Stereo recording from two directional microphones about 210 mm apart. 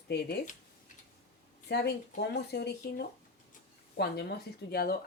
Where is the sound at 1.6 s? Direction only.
50° left (ahead or behind).